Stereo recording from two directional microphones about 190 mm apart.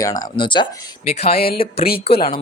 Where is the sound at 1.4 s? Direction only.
50° left (ahead or behind).